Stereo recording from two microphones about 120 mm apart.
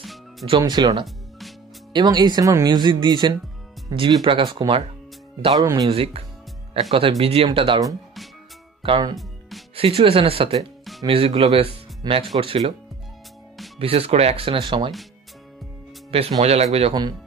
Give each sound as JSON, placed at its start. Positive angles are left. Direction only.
{"t": 0.0, "sound": "music", "side_deg": 0}
{"t": 0.6, "sound": "speech", "side_deg": -35}
{"t": 5.5, "sound": "speech", "side_deg": -30}
{"t": 5.9, "sound": "speech", "side_deg": -50}
{"t": 8.8, "sound": "speech", "side_deg": -50}
{"t": 13.7, "sound": "speech", "side_deg": -55}
{"t": 16.1, "sound": "speech", "side_deg": -55}